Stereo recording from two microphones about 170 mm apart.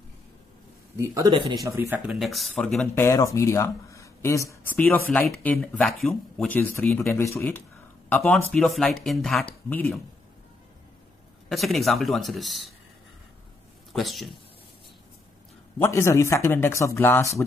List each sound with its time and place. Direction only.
0.9 s speech: 20° right (ahead or behind)
2.0 s speech: centre (ahead or behind)
2.9 s speech: 20° left (ahead or behind)
11.4 s speech: centre (ahead or behind)
13.9 s speech: centre (ahead or behind)
15.8 s speech: 15° left (ahead or behind)